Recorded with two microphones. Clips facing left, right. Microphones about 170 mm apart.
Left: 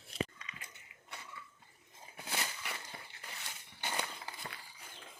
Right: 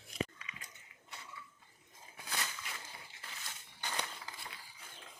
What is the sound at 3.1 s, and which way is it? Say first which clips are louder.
Crushing: left 1 dB; 65° left (ahead or behind).